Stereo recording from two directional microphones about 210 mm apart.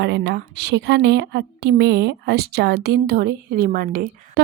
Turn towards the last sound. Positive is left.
turn(degrees=-40)  # may be behind; listen again after turning